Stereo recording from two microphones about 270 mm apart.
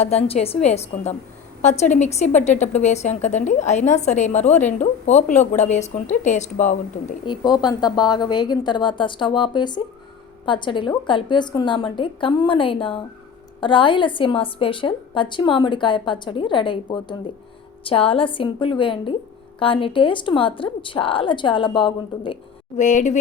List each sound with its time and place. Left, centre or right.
0.0 s a woman's voice: left
7.4 s a woman's voice: centre